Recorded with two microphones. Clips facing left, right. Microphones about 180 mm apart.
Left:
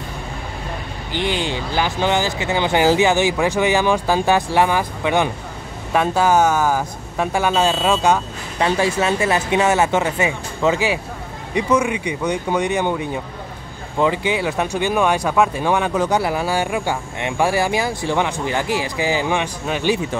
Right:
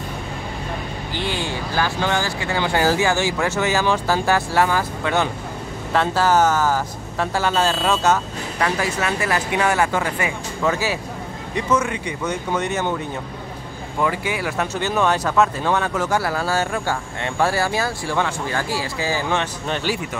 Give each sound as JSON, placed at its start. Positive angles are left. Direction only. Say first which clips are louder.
{"t": 1.1, "sound": "speech", "louder": "left 4 dB", "side_deg": 20}
{"t": 8.6, "sound": "speech", "louder": "left 5 dB", "side_deg": 25}
{"t": 13.9, "sound": "speech", "louder": "left 4 dB", "side_deg": 20}